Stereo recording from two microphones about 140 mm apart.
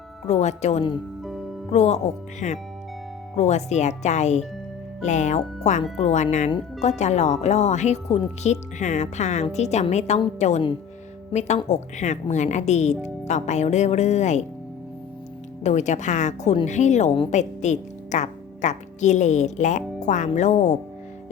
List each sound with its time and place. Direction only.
0.3 s a woman's voice: 55° left (ahead or behind)
1.2 s music: centre (ahead or behind)
1.7 s a woman's voice: 55° left (ahead or behind)
15.6 s a woman's voice: 55° left (ahead or behind)